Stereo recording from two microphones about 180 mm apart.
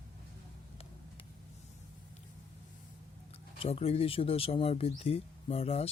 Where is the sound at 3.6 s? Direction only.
35° left (ahead or behind).